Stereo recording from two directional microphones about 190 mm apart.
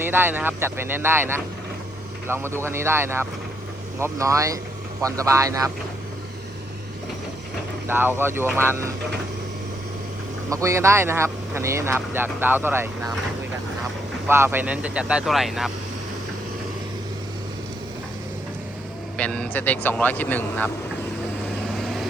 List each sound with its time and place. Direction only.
0.0 s speech: 10° right (ahead or behind)
7.9 s speech: 10° right (ahead or behind)
10.5 s speech: 15° right (ahead or behind)
14.3 s speech: 10° right (ahead or behind)
19.1 s speech: 5° left (ahead or behind)